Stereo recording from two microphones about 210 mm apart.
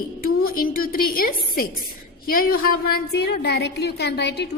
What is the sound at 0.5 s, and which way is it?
A woman's voice, 45° left (ahead or behind).